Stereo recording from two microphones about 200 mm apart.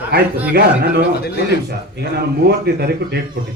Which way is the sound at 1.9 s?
55° right (ahead or behind).